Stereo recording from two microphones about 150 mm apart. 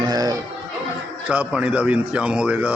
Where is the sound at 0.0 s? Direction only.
25° right (ahead or behind).